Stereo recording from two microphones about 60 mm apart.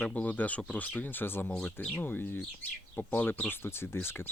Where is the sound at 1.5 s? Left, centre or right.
Centre.